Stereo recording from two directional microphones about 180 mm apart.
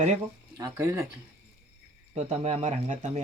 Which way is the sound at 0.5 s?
15° right (ahead or behind).